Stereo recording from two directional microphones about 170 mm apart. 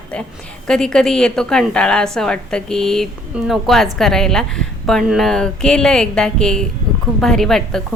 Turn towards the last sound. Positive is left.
turn(degrees=5)  # may be behind; listen again after turning